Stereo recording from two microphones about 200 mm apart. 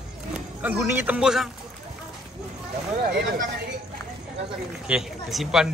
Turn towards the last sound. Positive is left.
turn(degrees=0)  # may be behind; listen again after turning